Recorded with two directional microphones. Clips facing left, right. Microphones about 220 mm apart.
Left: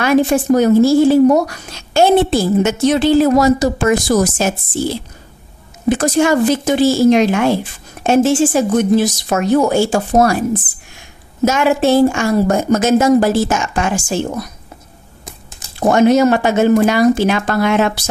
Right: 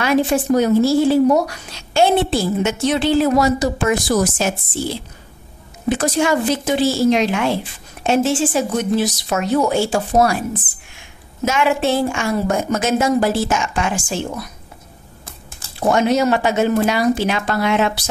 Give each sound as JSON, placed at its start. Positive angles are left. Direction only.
{"t": 0.0, "sound": "speech", "side_deg": 50}
{"t": 5.9, "sound": "speech", "side_deg": 45}
{"t": 11.4, "sound": "speech", "side_deg": 40}
{"t": 15.9, "sound": "speech", "side_deg": 50}